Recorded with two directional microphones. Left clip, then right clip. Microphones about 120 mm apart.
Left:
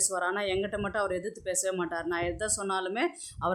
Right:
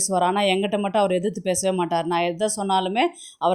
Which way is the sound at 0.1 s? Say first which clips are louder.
Right 14 dB; 40° right (ahead or behind).